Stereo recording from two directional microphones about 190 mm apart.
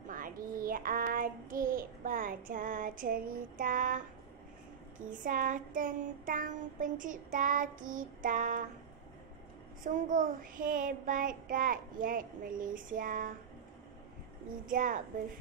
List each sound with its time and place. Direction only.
0.1 s a child's voice: 45° right (ahead or behind)
9.8 s a child's voice: 45° right (ahead or behind)
14.7 s a child's voice: 45° right (ahead or behind)